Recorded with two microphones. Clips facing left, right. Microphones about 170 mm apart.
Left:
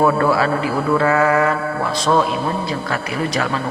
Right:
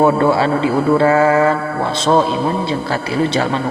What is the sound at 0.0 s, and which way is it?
A man's voice, 25° right (ahead or behind).